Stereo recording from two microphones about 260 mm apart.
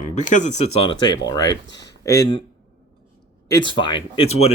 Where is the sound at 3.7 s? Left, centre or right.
Centre.